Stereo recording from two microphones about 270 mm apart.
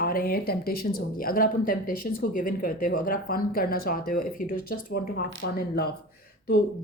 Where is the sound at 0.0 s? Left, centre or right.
Left.